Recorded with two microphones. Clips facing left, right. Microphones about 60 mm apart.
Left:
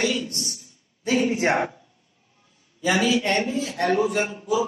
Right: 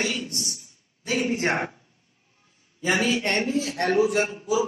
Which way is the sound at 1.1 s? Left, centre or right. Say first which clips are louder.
Left 3 dB; centre.